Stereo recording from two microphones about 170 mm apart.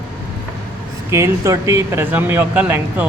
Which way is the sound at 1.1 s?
15° right (ahead or behind).